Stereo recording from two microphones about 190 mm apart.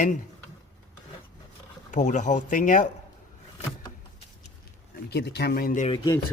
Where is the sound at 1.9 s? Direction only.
40° left (ahead or behind).